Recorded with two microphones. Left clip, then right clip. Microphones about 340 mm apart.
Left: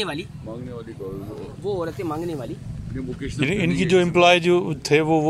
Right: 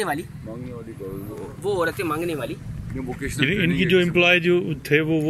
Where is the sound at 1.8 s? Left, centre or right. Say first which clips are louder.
Right 4 dB; right.